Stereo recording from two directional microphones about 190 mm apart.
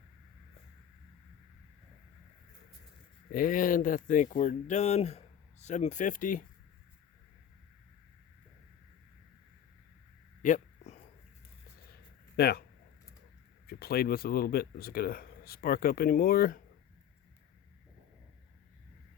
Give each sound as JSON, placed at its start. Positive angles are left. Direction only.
{"t": 3.3, "sound": "speech", "side_deg": 45}
{"t": 10.4, "sound": "a sound", "side_deg": 40}
{"t": 12.4, "sound": "speech", "side_deg": 55}
{"t": 13.7, "sound": "speech", "side_deg": 55}